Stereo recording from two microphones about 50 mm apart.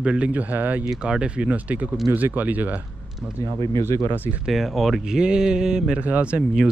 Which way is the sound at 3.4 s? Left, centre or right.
Left.